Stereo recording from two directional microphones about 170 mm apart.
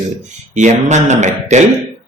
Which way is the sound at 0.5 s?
45° right (ahead or behind).